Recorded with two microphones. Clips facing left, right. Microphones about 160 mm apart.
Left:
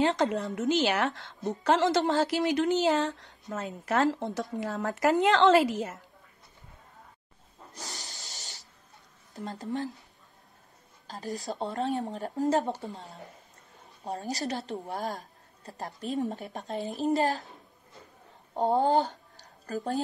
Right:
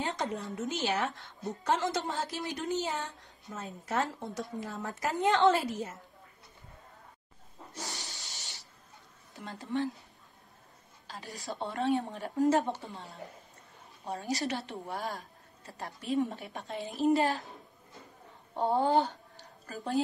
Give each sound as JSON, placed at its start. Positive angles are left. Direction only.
{"t": 0.0, "sound": "a woman's voice", "side_deg": 90}
{"t": 7.9, "sound": "hiss", "side_deg": 40}
{"t": 9.3, "sound": "a woman's voice", "side_deg": 40}
{"t": 11.1, "sound": "a woman's voice", "side_deg": 40}
{"t": 18.6, "sound": "speech", "side_deg": 40}